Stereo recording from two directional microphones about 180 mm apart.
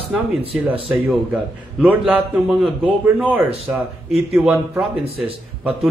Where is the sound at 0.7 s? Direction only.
30° right (ahead or behind).